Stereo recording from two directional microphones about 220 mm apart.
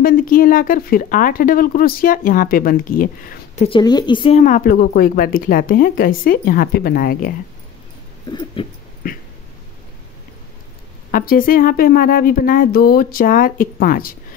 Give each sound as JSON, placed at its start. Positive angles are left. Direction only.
{"t": 0.0, "sound": "speech", "side_deg": 40}
{"t": 3.6, "sound": "speech", "side_deg": 20}
{"t": 8.3, "sound": "a sound", "side_deg": 20}
{"t": 11.1, "sound": "speech", "side_deg": 40}